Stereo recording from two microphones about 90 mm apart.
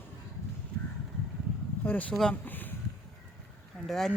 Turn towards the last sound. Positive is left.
turn(degrees=5)  # may be behind; listen again after turning